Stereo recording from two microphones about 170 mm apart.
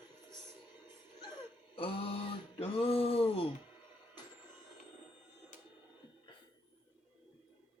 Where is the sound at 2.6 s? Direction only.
35° left (ahead or behind).